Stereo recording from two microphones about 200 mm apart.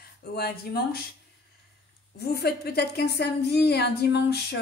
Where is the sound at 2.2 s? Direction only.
50° left (ahead or behind).